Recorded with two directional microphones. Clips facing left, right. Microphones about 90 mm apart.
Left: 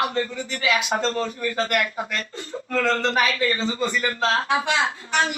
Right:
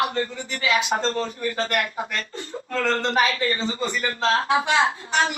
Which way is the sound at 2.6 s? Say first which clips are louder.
Left 2 dB; 30° left (ahead or behind).